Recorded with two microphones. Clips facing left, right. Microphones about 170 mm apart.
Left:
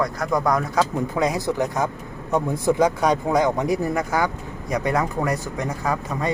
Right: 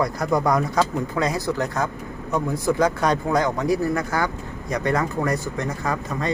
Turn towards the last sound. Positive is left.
turn(degrees=10)  # may be behind; listen again after turning